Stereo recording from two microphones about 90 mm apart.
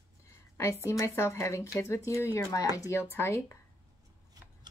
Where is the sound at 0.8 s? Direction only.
30° left (ahead or behind).